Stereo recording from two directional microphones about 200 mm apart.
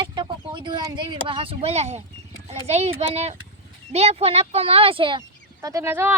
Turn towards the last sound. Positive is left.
turn(degrees=-10)  # may be behind; listen again after turning